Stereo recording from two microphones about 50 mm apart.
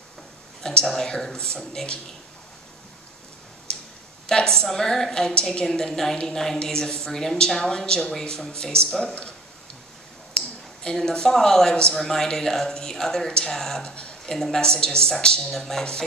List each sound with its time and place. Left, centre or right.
0.6 s speech: centre
3.7 s clicking: centre
4.3 s speech: centre
10.8 s speech: centre